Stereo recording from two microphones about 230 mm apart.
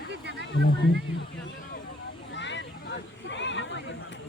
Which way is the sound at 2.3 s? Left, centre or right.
Left.